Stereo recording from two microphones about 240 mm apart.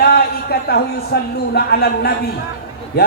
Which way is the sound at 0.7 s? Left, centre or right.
Left.